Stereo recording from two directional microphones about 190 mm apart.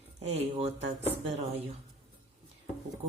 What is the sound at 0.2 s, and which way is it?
A woman's voice, 35° right (ahead or behind).